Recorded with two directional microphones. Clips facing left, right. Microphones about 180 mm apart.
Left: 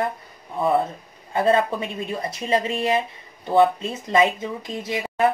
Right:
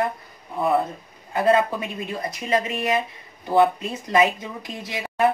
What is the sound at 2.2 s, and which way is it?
Speech, 30° left (ahead or behind).